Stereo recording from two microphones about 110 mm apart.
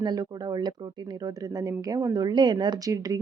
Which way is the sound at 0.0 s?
40° right (ahead or behind).